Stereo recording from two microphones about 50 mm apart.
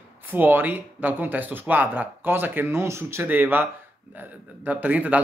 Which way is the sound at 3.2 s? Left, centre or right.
Right.